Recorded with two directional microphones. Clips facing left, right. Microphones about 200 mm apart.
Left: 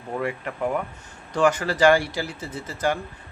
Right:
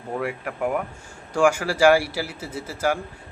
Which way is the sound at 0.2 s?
10° right (ahead or behind).